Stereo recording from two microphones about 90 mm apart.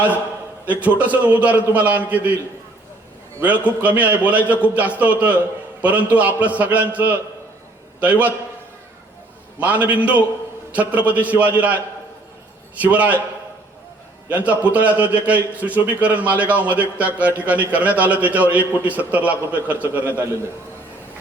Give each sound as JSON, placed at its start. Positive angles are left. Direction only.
{"t": 0.7, "sound": "a man's voice", "side_deg": -15}
{"t": 3.4, "sound": "a man's voice", "side_deg": -15}
{"t": 9.6, "sound": "a man's voice", "side_deg": -15}
{"t": 14.3, "sound": "a man's voice", "side_deg": -15}